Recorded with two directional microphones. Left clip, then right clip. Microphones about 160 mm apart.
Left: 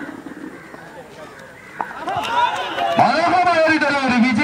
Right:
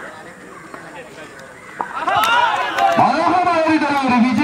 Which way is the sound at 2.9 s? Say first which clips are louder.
Left 3 dB; 25° left (ahead or behind).